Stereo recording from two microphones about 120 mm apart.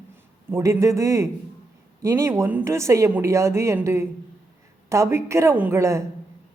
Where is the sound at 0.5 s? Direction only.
25° right (ahead or behind).